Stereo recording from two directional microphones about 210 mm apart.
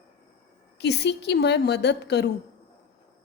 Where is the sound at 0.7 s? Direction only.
55° left (ahead or behind).